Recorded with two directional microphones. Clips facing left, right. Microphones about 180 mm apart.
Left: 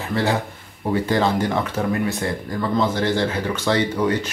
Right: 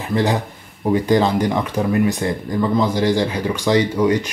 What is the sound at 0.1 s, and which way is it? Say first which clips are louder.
Speech: right 3 dB; 15° right (ahead or behind).